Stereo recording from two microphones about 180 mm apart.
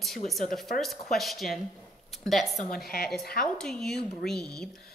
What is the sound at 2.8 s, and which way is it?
Speech, 55° left (ahead or behind).